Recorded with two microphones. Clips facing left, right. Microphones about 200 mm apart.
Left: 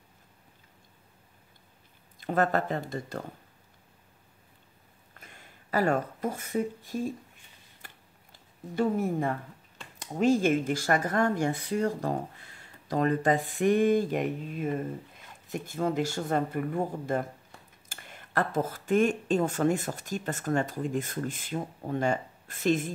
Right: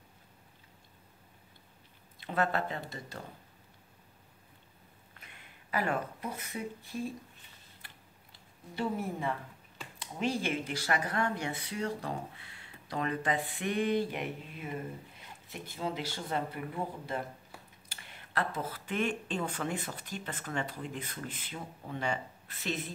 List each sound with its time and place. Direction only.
2.1 s speech: 45° left (ahead or behind)
5.2 s speech: 40° left (ahead or behind)
7.8 s a sound: 45° left (ahead or behind)
9.9 s speech: 45° left (ahead or behind)